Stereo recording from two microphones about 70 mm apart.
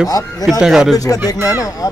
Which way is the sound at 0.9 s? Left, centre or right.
Left.